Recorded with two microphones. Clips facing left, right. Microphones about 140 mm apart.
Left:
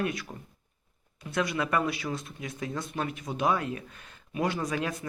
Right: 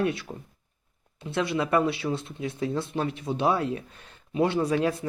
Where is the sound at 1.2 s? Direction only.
25° right (ahead or behind).